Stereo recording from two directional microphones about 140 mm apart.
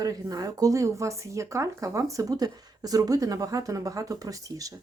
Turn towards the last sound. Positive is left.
turn(degrees=-25)  # may be behind; listen again after turning